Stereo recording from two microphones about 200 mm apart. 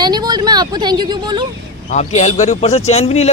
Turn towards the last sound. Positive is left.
turn(degrees=30)  # may be behind; listen again after turning